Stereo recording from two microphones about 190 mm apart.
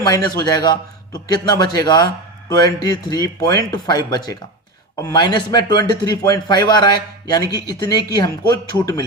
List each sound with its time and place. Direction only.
0.3 s speech: 20° left (ahead or behind)